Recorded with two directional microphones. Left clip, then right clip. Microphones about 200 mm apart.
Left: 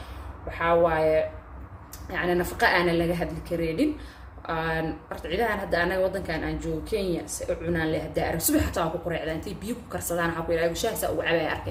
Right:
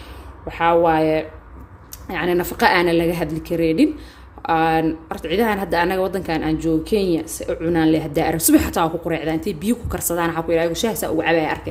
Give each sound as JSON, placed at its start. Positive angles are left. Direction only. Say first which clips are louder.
{"t": 0.6, "sound": "speech", "louder": "right 6 dB", "side_deg": -45}